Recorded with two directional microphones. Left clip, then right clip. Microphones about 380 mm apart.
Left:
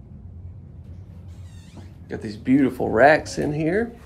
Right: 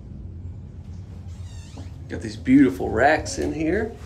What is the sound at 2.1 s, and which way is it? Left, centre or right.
Speech, centre.